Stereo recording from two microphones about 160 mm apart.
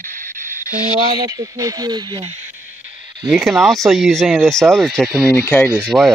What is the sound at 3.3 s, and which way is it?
Speech, centre (ahead or behind).